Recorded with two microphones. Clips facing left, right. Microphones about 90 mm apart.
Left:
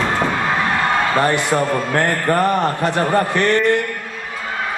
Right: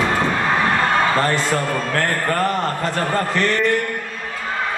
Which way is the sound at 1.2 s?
15° left (ahead or behind).